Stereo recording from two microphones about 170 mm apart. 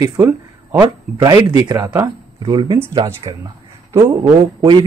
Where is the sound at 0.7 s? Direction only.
20° right (ahead or behind).